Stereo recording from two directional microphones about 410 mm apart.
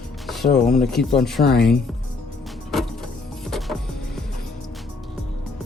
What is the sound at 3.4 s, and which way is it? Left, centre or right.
Music, centre.